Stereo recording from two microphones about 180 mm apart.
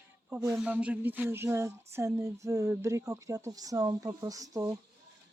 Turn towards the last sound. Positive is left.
turn(degrees=-20)  # may be behind; listen again after turning